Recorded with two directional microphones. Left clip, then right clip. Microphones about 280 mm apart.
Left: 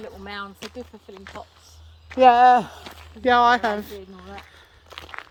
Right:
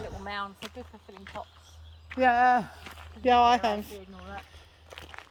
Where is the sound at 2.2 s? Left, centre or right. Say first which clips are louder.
Left 9 dB; centre.